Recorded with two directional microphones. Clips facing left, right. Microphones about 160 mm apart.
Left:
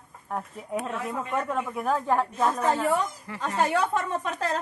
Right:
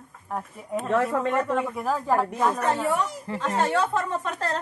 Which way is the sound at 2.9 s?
75° right (ahead or behind).